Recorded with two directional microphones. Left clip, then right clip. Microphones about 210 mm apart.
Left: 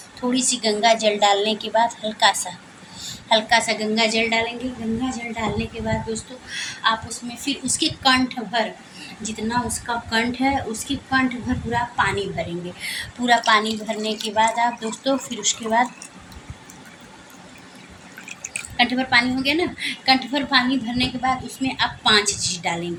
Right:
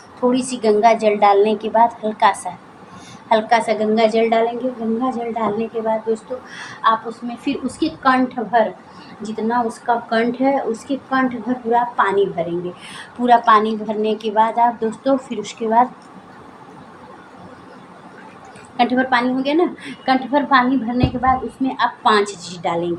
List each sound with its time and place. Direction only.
0.2 s a woman's voice: 20° left (ahead or behind)
18.8 s a woman's voice: 20° left (ahead or behind)